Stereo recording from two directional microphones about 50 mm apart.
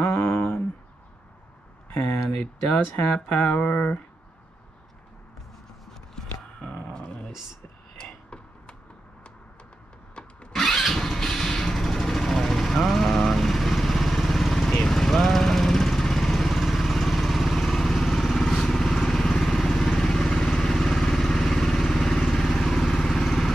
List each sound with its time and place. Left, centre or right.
2.0 s speech: centre
6.1 s a sound: centre
10.5 s vehicle: centre